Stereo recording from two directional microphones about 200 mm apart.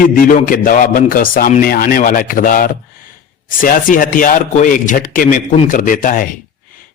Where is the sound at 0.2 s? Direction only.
45° left (ahead or behind).